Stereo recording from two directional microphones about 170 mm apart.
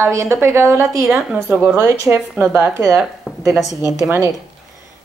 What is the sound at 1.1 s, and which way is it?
A woman's voice, 5° right (ahead or behind).